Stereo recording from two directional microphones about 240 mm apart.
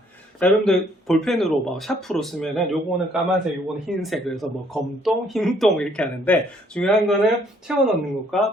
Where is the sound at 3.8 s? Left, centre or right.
Centre.